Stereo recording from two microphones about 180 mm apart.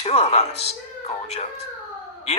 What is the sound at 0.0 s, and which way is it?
Speech, 35° left (ahead or behind).